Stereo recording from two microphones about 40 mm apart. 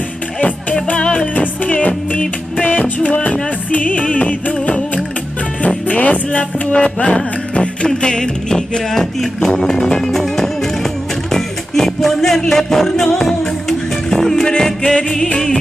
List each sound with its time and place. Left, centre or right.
1.0 s music: left
1.3 s music: left
5.9 s music: left; by 15.6 s centre